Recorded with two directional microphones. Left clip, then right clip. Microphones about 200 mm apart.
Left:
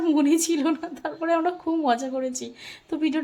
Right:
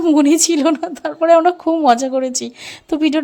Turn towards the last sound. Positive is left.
turn(degrees=-45)  # may be behind; listen again after turning